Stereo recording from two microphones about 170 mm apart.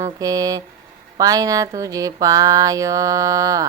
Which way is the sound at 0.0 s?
20° right (ahead or behind).